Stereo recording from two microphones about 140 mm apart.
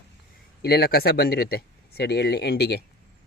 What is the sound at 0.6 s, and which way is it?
Speech, 90° left.